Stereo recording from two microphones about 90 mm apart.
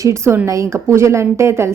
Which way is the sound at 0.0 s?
35° right (ahead or behind).